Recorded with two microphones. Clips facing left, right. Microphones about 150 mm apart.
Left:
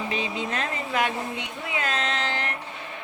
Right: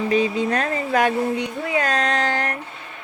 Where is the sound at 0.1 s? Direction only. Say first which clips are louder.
Right 9 dB; 45° right (ahead or behind).